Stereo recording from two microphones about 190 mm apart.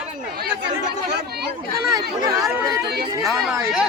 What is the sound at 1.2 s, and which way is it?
Speech, 55° right (ahead or behind).